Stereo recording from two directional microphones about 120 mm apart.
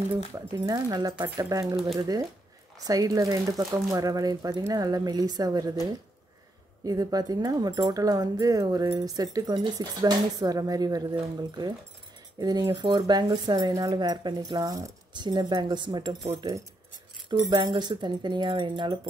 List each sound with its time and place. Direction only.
0.7 s speech: 30° right (ahead or behind)
6.8 s speech: 30° right (ahead or behind)